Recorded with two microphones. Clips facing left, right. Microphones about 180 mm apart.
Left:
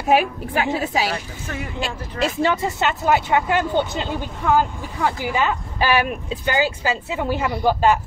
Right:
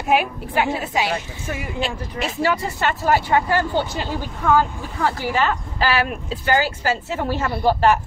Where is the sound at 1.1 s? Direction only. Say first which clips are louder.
Right 2 dB; 10° right (ahead or behind).